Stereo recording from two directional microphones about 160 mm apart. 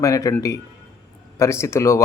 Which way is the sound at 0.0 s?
20° left (ahead or behind).